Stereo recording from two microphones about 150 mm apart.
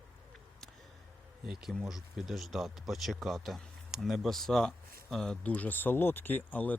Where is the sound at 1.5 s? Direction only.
Centre (ahead or behind).